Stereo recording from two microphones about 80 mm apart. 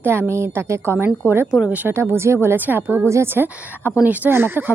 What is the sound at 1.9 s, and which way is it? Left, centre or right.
Speech, right.